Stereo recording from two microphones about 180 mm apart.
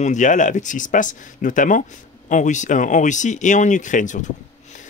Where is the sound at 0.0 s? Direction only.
45° left (ahead or behind).